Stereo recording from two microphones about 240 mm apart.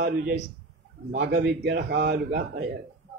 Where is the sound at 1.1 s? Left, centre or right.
Right.